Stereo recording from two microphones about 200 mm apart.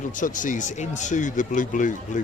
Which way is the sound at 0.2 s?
40° left (ahead or behind).